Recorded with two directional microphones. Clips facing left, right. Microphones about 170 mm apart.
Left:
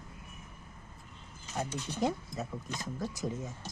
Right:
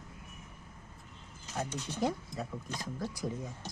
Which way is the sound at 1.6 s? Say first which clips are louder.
Left 1 dB; 20° left (ahead or behind).